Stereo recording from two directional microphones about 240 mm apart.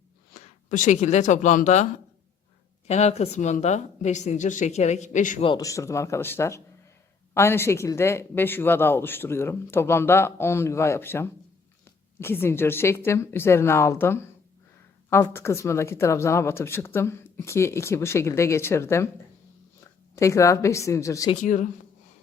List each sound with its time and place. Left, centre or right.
0.7 s a woman's voice: left
5.5 s speech: centre
21.4 s speech: left